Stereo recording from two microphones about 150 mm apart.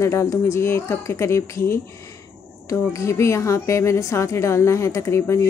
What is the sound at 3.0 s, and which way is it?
Speech, 20° left (ahead or behind).